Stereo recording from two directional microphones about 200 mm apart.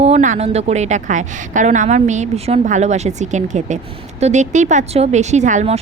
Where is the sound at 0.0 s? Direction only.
35° right (ahead or behind).